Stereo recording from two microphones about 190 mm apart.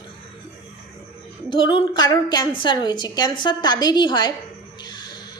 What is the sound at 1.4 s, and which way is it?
A woman's voice, 25° left (ahead or behind).